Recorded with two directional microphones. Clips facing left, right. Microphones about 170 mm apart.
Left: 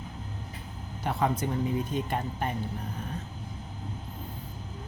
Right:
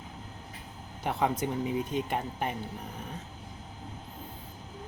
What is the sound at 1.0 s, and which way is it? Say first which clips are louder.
Speech: left 1 dB; 15° right (ahead or behind).